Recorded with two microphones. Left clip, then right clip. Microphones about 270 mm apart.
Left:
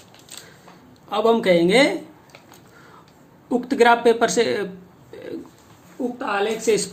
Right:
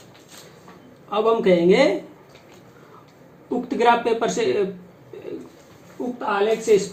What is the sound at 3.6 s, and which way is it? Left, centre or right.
Speech, left.